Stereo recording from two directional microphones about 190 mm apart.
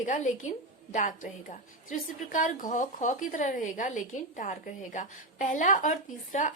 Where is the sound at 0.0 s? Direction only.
40° left (ahead or behind).